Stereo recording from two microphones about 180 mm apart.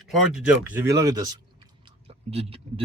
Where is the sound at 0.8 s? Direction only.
20° right (ahead or behind).